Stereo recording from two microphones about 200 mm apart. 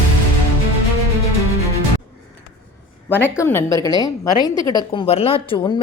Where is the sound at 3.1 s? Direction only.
10° left (ahead or behind).